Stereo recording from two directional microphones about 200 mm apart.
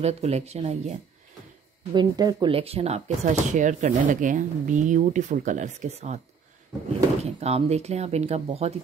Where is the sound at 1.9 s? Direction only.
20° right (ahead or behind).